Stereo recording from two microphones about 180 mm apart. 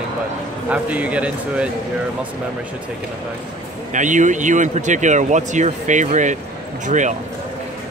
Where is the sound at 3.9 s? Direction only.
45° right (ahead or behind).